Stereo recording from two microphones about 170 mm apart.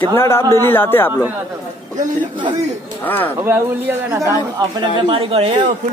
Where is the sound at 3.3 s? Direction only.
15° right (ahead or behind).